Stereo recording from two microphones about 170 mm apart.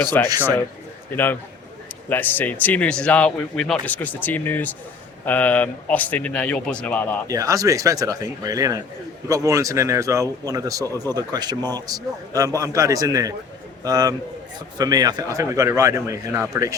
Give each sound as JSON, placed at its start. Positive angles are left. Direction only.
{"t": 0.1, "sound": "speech", "side_deg": 10}
{"t": 7.3, "sound": "a man's voice", "side_deg": -20}